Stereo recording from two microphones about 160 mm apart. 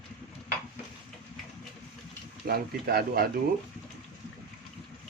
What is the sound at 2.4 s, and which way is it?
Speech, 70° right (ahead or behind).